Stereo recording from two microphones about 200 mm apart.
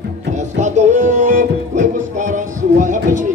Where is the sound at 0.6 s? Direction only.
35° right (ahead or behind).